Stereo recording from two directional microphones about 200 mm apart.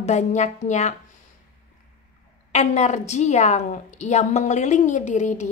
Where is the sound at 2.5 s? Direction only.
35° left (ahead or behind).